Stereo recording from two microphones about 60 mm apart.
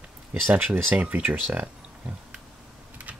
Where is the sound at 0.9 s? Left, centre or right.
Centre.